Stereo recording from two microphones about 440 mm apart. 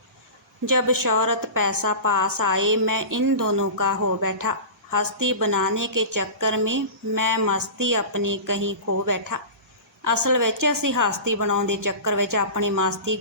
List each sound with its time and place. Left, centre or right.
0.8 s a woman's voice: right